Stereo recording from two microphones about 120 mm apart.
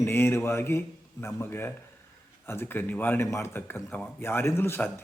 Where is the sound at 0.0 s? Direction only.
20° left (ahead or behind).